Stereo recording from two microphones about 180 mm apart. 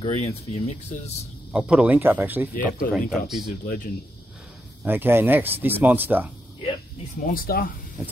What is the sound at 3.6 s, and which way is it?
Speech, 50° left (ahead or behind).